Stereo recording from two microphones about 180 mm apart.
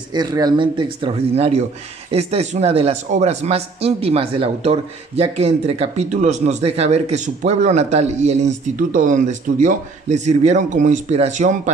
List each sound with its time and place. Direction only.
0.1 s speech: 20° right (ahead or behind); by 11.7 s 40° right (ahead or behind)